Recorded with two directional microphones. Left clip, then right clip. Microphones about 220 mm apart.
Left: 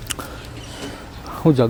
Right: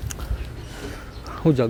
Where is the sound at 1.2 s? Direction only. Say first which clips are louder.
Left 4 dB; centre (ahead or behind).